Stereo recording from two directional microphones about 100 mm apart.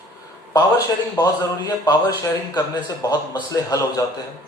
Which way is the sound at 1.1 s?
45° left (ahead or behind).